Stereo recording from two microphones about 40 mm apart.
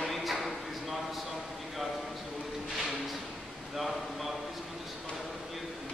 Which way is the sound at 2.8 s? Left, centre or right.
Centre.